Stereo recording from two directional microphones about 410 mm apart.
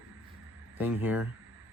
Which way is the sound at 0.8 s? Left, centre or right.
Centre.